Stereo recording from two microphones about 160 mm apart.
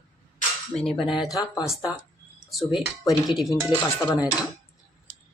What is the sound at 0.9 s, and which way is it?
Speech, centre (ahead or behind).